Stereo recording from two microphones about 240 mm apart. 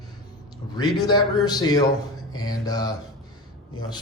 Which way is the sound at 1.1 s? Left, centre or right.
Centre.